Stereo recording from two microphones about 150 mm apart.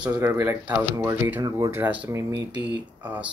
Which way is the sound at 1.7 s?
10° right (ahead or behind).